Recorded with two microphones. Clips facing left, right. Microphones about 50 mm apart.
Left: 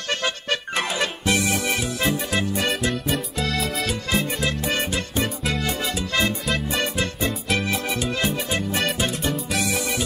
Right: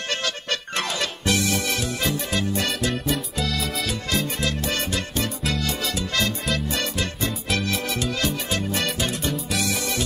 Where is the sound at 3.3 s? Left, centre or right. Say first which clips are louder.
Left 2 dB; centre.